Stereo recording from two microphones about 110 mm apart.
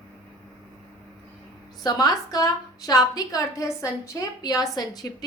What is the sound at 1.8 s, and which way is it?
A woman's voice, 35° left (ahead or behind).